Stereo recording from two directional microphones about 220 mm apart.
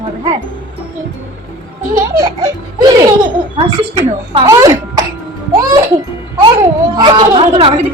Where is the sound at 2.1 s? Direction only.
15° right (ahead or behind).